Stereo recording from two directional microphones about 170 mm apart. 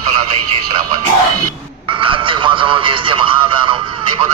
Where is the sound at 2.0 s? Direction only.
30° right (ahead or behind).